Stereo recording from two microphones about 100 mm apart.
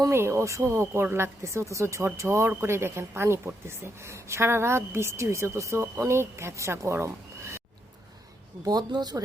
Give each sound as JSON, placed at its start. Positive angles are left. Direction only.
{"t": 0.0, "sound": "speech", "side_deg": -25}
{"t": 8.6, "sound": "speech", "side_deg": -45}